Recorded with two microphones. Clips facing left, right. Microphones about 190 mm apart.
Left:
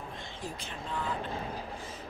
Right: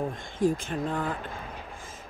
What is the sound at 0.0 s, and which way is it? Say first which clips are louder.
Speech: right 14 dB; 50° right (ahead or behind).